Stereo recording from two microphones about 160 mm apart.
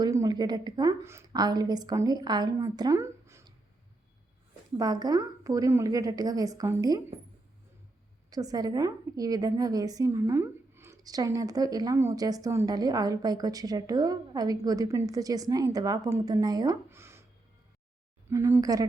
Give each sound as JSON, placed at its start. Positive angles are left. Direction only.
{"t": 0.0, "sound": "a woman's voice", "side_deg": -20}
{"t": 4.8, "sound": "a woman's voice", "side_deg": -25}
{"t": 8.3, "sound": "a woman's voice", "side_deg": -25}
{"t": 18.3, "sound": "a woman's voice", "side_deg": -20}